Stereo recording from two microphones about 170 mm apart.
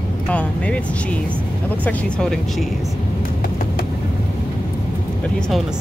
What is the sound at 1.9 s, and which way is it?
Speech, 5° left (ahead or behind).